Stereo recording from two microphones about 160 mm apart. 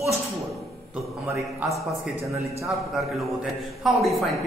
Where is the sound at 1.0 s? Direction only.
Centre (ahead or behind).